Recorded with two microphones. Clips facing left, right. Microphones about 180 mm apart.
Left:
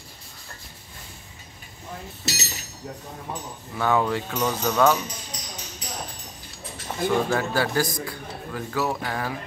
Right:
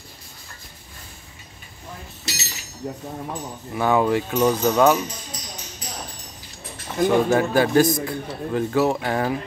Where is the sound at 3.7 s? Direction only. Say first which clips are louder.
Right 4 dB; 15° right (ahead or behind).